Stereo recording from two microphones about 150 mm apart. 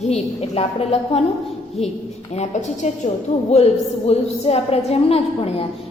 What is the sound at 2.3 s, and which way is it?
A woman's voice, 50° left (ahead or behind).